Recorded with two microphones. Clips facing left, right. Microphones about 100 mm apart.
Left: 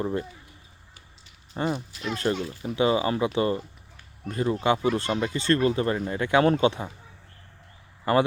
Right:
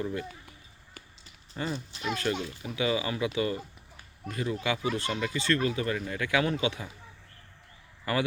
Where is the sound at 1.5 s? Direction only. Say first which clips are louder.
Left 6 dB; 40° left (ahead or behind).